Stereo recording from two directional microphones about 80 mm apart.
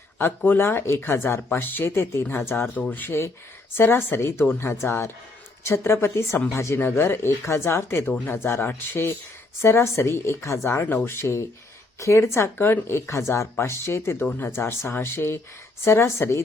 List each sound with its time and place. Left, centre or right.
0.2 s speech: left